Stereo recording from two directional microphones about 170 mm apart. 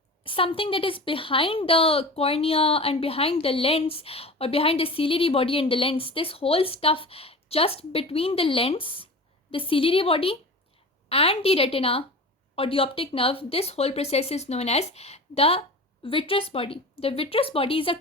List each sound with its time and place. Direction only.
0.2 s a woman's voice: 30° left (ahead or behind)